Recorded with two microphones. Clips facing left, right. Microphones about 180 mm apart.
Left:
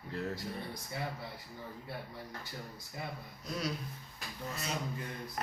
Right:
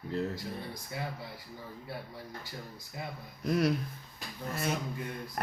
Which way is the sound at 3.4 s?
60° right (ahead or behind).